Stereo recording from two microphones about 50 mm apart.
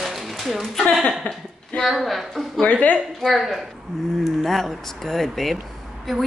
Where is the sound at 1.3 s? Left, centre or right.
Left.